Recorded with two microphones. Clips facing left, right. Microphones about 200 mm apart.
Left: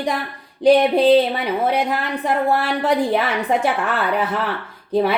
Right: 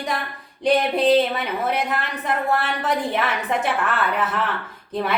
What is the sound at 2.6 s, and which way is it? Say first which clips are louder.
Speech: left 5 dB; 30° left (ahead or behind).